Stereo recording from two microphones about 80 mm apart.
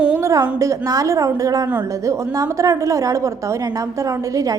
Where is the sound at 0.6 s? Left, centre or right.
Right.